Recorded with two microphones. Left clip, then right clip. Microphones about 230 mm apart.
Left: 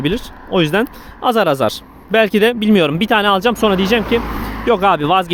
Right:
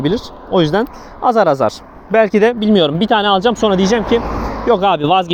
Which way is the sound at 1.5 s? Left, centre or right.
Centre.